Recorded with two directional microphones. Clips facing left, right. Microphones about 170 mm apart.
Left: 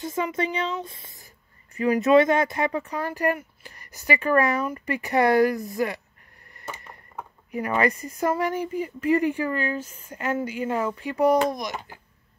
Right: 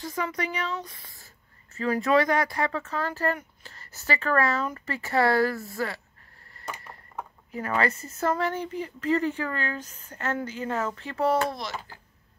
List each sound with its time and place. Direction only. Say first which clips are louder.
0.0 s speech: left 4 dB; 20° left (ahead or behind)
7.2 s speech: left 4 dB; 15° left (ahead or behind)